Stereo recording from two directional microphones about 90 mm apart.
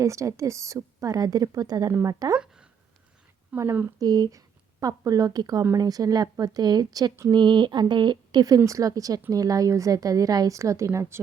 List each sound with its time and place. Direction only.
0.0 s a woman's voice: 35° right (ahead or behind)
3.5 s a woman's voice: 25° right (ahead or behind)
3.9 s a woman's voice: 45° right (ahead or behind)